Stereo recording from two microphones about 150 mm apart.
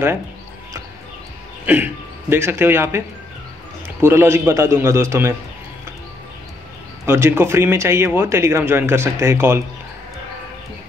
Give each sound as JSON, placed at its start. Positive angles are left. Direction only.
{"t": 1.7, "sound": "speech", "side_deg": -15}
{"t": 4.0, "sound": "speech", "side_deg": -15}
{"t": 7.1, "sound": "speech", "side_deg": -15}